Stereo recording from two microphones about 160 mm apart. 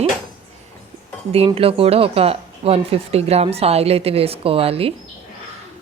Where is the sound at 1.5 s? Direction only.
35° right (ahead or behind).